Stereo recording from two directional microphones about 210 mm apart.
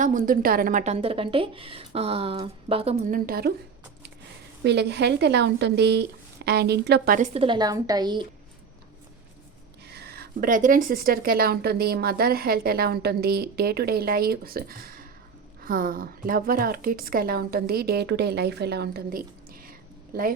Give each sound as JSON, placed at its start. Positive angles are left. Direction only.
{"t": 0.0, "sound": "a woman's voice", "side_deg": -40}
{"t": 3.1, "sound": "speech", "side_deg": -45}
{"t": 4.6, "sound": "speech", "side_deg": -55}
{"t": 7.3, "sound": "a woman's voice", "side_deg": -25}
{"t": 9.8, "sound": "speech", "side_deg": -50}